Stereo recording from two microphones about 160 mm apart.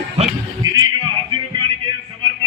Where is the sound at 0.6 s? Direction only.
25° right (ahead or behind).